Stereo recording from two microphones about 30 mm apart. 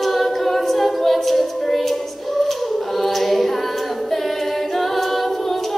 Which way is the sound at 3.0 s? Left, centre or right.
Centre.